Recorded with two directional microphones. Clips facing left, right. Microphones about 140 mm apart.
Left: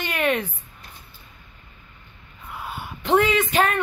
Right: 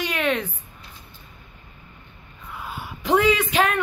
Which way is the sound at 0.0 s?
5° left (ahead or behind).